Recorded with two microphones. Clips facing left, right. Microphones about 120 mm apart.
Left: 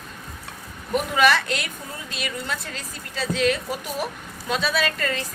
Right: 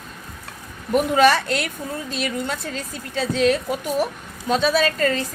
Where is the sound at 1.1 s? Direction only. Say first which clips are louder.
Right 3 dB; 35° right (ahead or behind).